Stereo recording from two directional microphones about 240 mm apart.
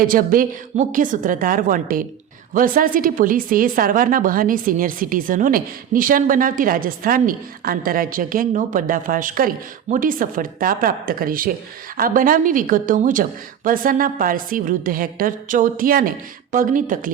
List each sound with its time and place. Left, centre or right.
0.0 s a woman's voice: right